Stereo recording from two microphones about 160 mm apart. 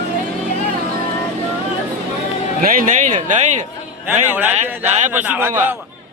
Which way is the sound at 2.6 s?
60° right (ahead or behind).